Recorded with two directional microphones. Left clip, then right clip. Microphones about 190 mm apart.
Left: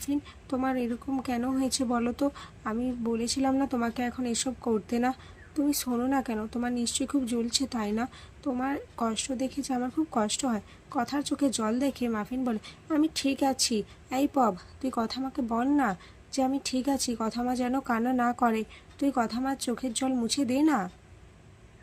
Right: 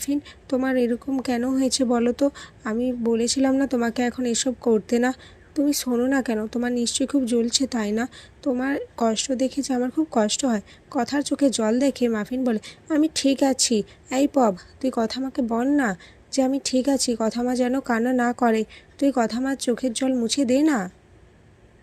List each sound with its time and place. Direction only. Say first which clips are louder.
0.0 s speech: right 5 dB; 20° right (ahead or behind)